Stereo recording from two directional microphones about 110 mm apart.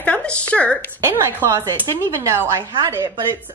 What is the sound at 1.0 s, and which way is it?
A woman's voice, 20° right (ahead or behind).